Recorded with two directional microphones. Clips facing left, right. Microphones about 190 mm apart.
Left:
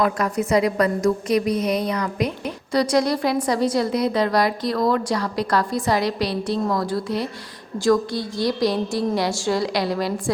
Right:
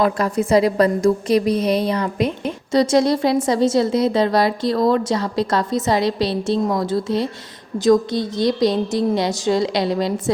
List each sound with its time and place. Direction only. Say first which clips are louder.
0.0 s a woman's voice: right 3 dB; 30° right (ahead or behind)